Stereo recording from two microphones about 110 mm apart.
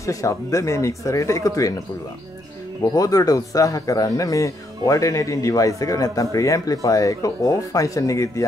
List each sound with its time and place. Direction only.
0.0 s speech: 30° left (ahead or behind)
2.8 s speech: 35° left (ahead or behind)